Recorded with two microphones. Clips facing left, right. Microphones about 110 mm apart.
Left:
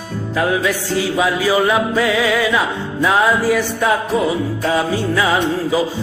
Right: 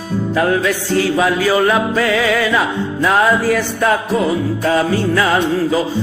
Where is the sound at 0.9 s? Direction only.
10° left (ahead or behind).